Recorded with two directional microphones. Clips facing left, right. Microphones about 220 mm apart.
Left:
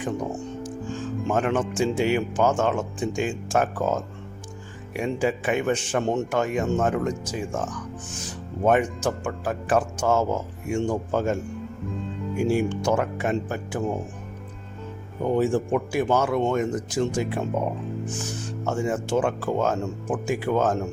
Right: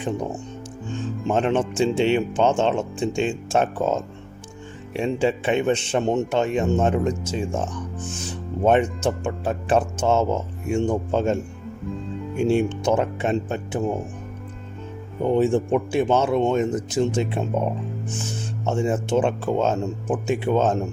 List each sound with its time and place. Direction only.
0.9 s speech: 25° right (ahead or behind)
12.4 s speech: 25° right (ahead or behind)
15.3 s speech: 25° right (ahead or behind)